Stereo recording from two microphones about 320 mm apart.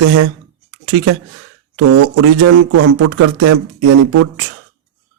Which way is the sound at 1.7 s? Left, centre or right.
Right.